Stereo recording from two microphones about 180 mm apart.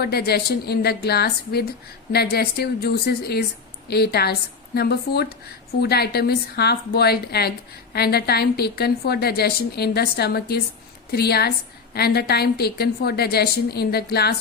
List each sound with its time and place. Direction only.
0.0 s a woman's voice: 60° left (ahead or behind)